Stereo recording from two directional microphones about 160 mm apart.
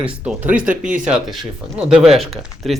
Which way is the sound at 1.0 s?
5° right (ahead or behind).